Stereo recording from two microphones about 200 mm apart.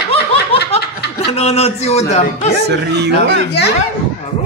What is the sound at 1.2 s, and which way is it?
Speech, 30° left (ahead or behind).